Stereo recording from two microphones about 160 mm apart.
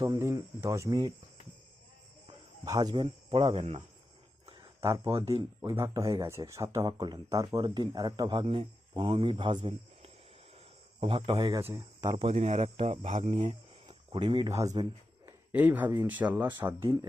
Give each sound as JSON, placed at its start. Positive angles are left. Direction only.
{"t": 0.0, "sound": "speech", "side_deg": -20}
{"t": 2.6, "sound": "speech", "side_deg": -20}
{"t": 2.9, "sound": "speech", "side_deg": -30}
{"t": 4.8, "sound": "speech", "side_deg": -15}
{"t": 12.0, "sound": "speech", "side_deg": -40}
{"t": 15.3, "sound": "speech", "side_deg": -10}